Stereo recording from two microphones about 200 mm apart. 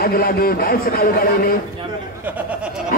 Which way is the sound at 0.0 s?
45° left (ahead or behind).